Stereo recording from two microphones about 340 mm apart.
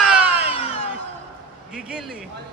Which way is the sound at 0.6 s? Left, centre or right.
Centre.